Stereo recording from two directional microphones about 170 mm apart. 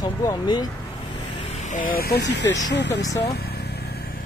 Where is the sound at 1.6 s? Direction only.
50° left (ahead or behind); by 3.0 s 90° left.